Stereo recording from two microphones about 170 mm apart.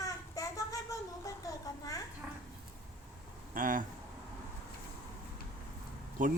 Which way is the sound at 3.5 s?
55° right (ahead or behind).